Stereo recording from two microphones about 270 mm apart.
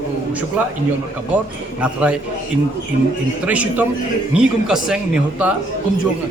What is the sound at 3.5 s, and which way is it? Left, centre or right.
Speech, centre.